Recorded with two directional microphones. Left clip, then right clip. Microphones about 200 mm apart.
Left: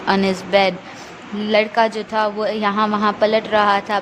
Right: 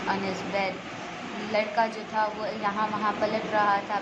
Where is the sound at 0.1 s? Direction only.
50° left (ahead or behind).